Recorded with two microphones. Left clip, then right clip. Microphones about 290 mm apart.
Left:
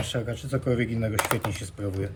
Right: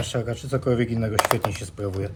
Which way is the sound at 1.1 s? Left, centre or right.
Right.